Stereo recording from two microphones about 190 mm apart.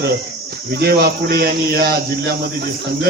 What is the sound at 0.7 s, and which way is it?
Speech, 55° right (ahead or behind).